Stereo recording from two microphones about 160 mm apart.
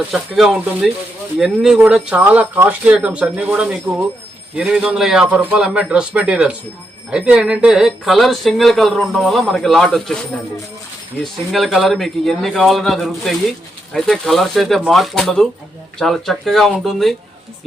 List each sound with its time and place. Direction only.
0.1 s speech: 5° right (ahead or behind)